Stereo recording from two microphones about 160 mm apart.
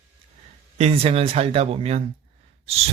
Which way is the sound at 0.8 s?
40° right (ahead or behind).